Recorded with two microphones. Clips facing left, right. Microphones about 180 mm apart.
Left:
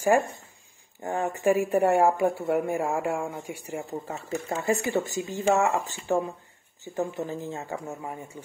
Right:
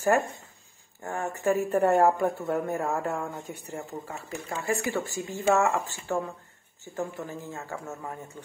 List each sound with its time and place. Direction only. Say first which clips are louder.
1.0 s speech: left 3 dB; 15° left (ahead or behind)
4.1 s speech: left 5 dB; 20° left (ahead or behind)